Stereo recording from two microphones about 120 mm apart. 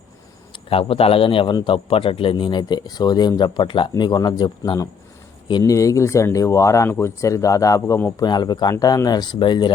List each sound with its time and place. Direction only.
0.5 s a man's voice: 50° left (ahead or behind)